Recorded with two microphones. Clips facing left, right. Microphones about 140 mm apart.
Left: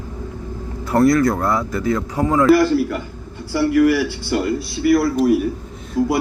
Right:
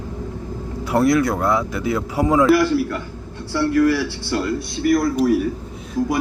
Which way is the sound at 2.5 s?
Centre (ahead or behind).